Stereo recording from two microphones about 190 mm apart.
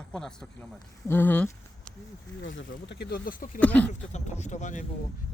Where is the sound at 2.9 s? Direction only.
60° left (ahead or behind).